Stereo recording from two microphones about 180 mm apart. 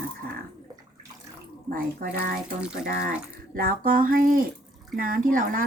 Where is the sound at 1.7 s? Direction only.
55° right (ahead or behind).